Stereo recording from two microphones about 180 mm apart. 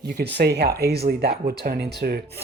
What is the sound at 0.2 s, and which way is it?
Speech, 65° right (ahead or behind).